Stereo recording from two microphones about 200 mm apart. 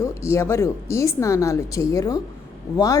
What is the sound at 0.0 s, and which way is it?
A woman's voice, 15° left (ahead or behind).